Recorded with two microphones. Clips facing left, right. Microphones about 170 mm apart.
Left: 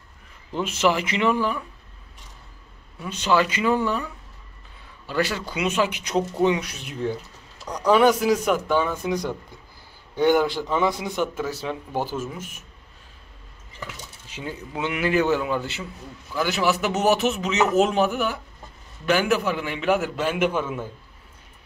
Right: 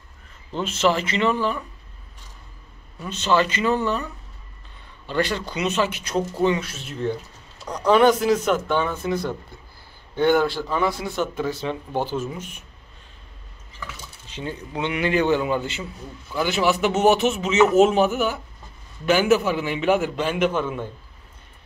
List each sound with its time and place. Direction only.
0.5 s speech: 10° left (ahead or behind)
3.0 s speech: 10° left (ahead or behind)
11.3 s speech: 5° left (ahead or behind)
14.3 s a man's voice: 5° left (ahead or behind)